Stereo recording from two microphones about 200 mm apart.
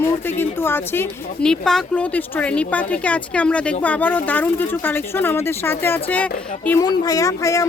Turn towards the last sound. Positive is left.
turn(degrees=15)  # may be behind; listen again after turning